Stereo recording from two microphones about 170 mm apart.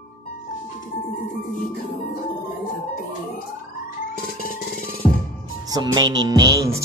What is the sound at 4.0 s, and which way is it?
Music, 55° left (ahead or behind).